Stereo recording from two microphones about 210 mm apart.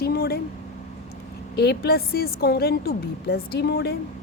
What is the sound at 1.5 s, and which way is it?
A woman's voice, 50° left (ahead or behind).